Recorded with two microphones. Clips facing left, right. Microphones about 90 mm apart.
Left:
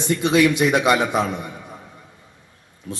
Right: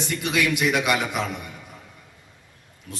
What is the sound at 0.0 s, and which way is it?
A man's voice, 25° left (ahead or behind).